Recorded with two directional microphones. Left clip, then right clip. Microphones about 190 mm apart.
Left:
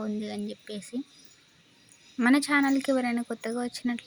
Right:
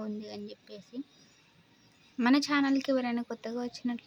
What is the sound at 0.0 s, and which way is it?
Speech, 20° left (ahead or behind).